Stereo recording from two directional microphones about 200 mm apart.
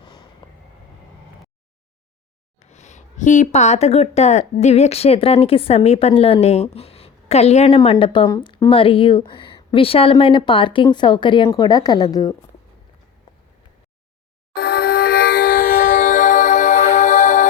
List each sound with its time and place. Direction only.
0.0 s vehicle: 20° left (ahead or behind)
2.6 s speech: 35° left (ahead or behind); by 12.3 s 20° left (ahead or behind)
13.3 s a sound: 20° left (ahead or behind)
14.5 s music: 50° left (ahead or behind); by 17.5 s 35° left (ahead or behind)